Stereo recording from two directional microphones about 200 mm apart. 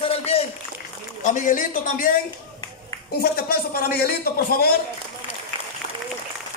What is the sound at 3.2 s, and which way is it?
Speech, 45° left (ahead or behind).